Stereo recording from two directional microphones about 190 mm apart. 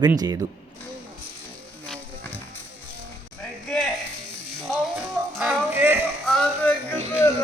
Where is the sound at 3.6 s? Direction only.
Centre (ahead or behind).